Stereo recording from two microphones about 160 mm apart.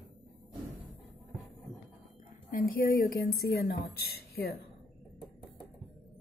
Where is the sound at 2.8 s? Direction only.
65° left (ahead or behind).